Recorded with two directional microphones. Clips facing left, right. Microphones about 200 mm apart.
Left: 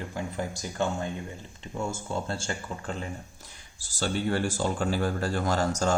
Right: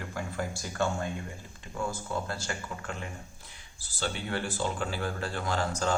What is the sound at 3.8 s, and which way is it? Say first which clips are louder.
Speech: left 6 dB; 45° left (ahead or behind).